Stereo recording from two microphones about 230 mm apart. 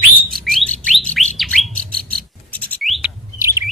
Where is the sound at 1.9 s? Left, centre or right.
Right.